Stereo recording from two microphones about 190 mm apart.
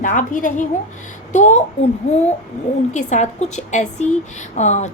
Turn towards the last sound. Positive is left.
turn(degrees=40)  # may be behind; listen again after turning